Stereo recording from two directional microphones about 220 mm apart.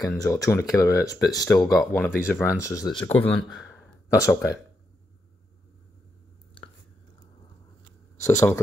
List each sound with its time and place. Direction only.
0.1 s speech: 15° left (ahead or behind)
1.8 s speech: 5° left (ahead or behind)
8.2 s speech: 10° left (ahead or behind)